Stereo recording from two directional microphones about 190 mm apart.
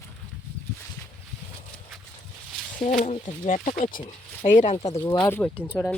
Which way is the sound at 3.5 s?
45° left (ahead or behind).